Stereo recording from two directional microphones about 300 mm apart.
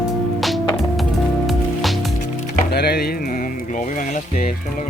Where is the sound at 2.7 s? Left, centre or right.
Left.